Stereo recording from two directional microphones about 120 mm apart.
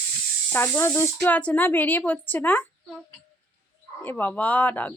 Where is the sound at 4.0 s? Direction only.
15° left (ahead or behind).